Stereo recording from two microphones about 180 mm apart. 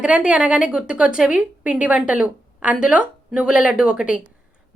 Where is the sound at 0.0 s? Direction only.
5° right (ahead or behind).